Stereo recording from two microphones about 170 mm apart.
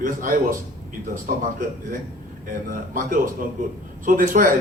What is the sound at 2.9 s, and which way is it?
A man's voice, 55° right (ahead or behind).